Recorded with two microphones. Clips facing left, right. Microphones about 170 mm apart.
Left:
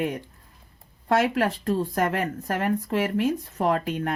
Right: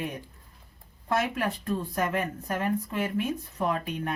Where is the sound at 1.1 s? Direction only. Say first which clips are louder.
Left 6 dB; 85° left.